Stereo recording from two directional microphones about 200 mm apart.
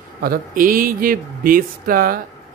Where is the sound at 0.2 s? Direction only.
45° right (ahead or behind).